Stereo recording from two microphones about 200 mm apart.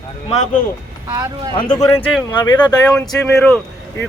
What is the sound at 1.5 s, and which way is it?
Speech, 20° left (ahead or behind).